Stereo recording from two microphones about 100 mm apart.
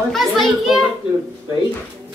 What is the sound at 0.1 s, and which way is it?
Children playing, centre (ahead or behind).